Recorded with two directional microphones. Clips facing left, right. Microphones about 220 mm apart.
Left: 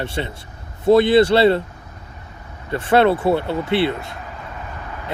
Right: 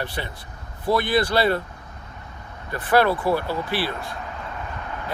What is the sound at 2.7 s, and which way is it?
Speech, 25° left (ahead or behind).